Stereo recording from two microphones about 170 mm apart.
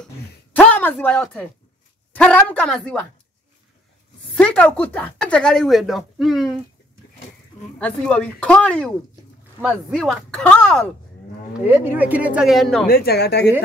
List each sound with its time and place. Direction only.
0.0 s a sound: 10° left (ahead or behind)
2.1 s speech: 5° left (ahead or behind)
4.4 s speech: 5° left (ahead or behind)
7.8 s speech: 5° left (ahead or behind)
9.6 s speech: 5° right (ahead or behind)
11.6 s speech: 10° right (ahead or behind)
12.8 s speech: 65° left (ahead or behind)